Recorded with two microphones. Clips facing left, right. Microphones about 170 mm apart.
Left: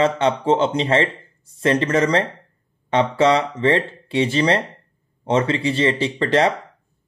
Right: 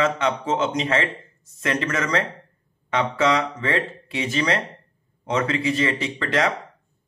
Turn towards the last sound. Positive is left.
turn(degrees=30)  # may be behind; listen again after turning